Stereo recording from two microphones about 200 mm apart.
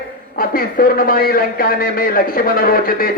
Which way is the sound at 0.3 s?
45° left (ahead or behind).